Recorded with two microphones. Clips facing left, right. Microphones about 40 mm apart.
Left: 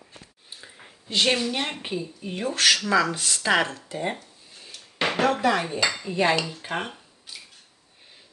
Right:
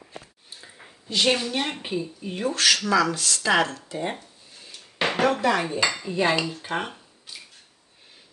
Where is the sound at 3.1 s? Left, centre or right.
Left.